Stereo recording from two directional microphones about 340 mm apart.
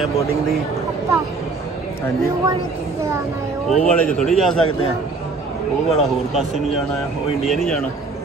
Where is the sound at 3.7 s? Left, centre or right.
Centre.